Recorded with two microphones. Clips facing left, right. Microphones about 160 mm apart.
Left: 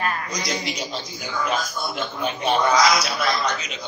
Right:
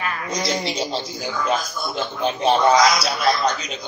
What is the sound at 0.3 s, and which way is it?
A man's voice, 30° right (ahead or behind).